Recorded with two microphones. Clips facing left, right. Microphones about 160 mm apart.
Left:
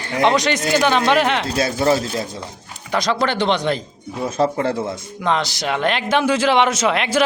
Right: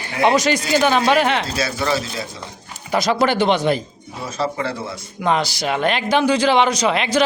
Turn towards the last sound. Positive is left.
turn(degrees=0)  # may be behind; listen again after turning